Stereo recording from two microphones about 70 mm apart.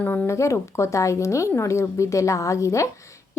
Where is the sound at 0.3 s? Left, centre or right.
Left.